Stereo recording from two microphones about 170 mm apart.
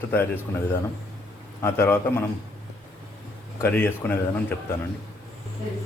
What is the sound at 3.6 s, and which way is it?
Speech, 15° left (ahead or behind).